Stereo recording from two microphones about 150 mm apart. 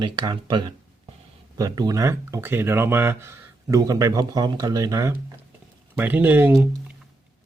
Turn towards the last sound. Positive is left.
turn(degrees=-15)  # may be behind; listen again after turning